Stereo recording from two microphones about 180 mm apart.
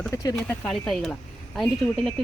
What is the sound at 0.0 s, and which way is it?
Speech, 15° left (ahead or behind).